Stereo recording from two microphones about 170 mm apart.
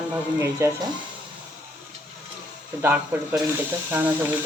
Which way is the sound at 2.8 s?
10° right (ahead or behind).